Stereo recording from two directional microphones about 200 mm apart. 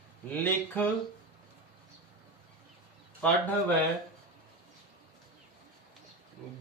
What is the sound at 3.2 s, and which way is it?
Speech, 5° left (ahead or behind).